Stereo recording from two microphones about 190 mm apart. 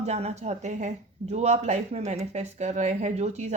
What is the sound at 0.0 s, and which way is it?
Speech, 35° right (ahead or behind).